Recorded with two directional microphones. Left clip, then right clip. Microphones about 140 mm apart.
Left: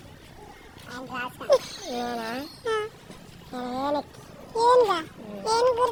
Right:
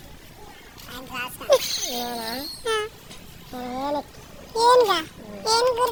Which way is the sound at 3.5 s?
15° left (ahead or behind).